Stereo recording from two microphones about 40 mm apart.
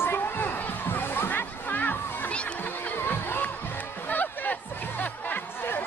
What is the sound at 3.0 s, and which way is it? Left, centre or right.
Music, left.